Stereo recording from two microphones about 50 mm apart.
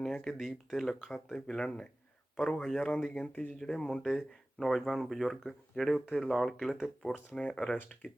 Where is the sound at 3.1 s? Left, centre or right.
Left.